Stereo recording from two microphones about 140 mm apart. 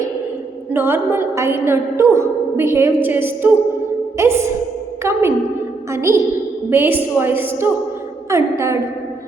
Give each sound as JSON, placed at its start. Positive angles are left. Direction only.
{"t": 0.7, "sound": "a woman's voice", "side_deg": -15}